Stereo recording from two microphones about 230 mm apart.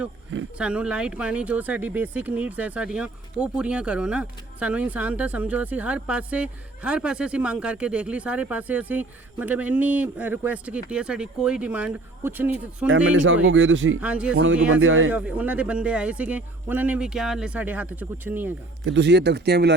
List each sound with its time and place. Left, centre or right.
0.6 s speech: centre
13.1 s speech: right
14.0 s speech: centre
14.3 s speech: right
15.1 s speech: centre
18.9 s speech: right